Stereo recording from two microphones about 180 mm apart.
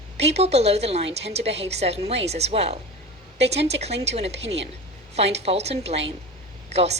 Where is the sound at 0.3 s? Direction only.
35° right (ahead or behind).